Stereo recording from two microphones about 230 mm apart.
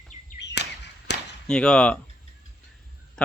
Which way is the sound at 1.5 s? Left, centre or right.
Centre.